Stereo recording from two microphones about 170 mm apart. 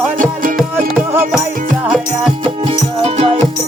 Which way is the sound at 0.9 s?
5° right (ahead or behind).